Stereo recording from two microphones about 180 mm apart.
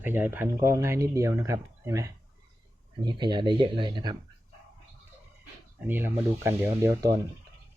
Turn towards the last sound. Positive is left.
turn(degrees=-15)  # may be behind; listen again after turning